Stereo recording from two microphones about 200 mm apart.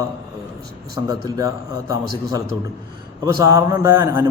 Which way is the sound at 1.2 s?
15° right (ahead or behind).